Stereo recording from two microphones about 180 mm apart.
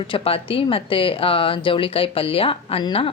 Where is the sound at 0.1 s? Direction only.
30° left (ahead or behind).